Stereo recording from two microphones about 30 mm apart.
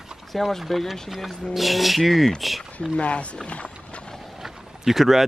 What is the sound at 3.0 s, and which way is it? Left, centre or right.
Speech, left.